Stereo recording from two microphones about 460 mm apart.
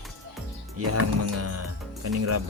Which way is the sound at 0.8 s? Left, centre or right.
Right.